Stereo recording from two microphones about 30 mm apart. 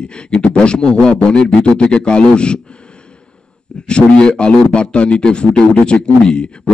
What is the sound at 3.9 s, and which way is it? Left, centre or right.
Speech, left.